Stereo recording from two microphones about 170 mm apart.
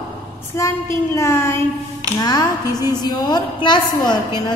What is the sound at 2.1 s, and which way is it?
A woman's voice, 25° left (ahead or behind).